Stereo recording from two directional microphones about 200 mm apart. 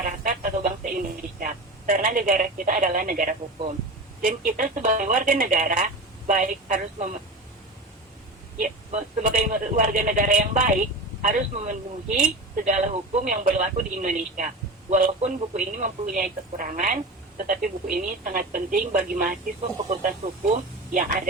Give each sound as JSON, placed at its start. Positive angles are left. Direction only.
{"t": 0.0, "sound": "radio", "side_deg": -40}
{"t": 1.4, "sound": "speech", "side_deg": -45}
{"t": 8.5, "sound": "speech", "side_deg": -40}